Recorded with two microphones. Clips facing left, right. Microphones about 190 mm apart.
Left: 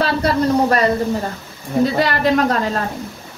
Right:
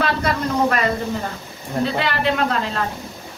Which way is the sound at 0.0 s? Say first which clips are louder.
Left 4 dB; 35° left (ahead or behind).